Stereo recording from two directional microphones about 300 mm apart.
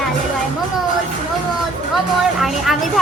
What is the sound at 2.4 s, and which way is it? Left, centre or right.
Speech, centre.